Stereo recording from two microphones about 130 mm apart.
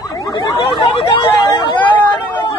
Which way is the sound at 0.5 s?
40° left (ahead or behind).